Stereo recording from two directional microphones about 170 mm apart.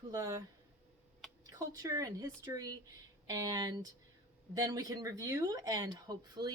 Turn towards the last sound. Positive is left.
turn(degrees=-25)  # may be behind; listen again after turning